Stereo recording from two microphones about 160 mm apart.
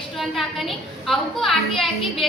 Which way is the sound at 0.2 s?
Centre (ahead or behind).